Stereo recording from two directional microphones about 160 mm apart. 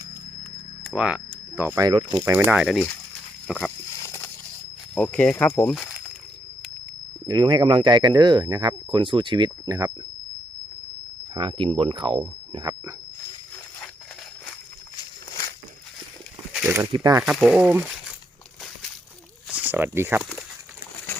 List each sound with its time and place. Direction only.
0.9 s speech: 5° right (ahead or behind)
1.8 s speech: 30° right (ahead or behind)
2.1 s speech: 10° right (ahead or behind)
2.7 s speech: 5° left (ahead or behind)
3.4 s a sound: centre (ahead or behind)
3.9 s a sound: 20° left (ahead or behind)
4.9 s speech: 10° left (ahead or behind)
7.3 s speech: 25° right (ahead or behind)
11.3 s speech: 30° right (ahead or behind)
14.9 s walk: 25° left (ahead or behind)
16.5 s a sound: 10° right (ahead or behind)
16.9 s speech: 25° right (ahead or behind)
17.2 s speech: centre (ahead or behind)
19.5 s speech: 10° right (ahead or behind)